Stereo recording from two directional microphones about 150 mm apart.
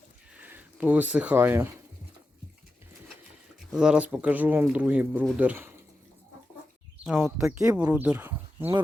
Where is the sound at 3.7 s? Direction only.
5° right (ahead or behind).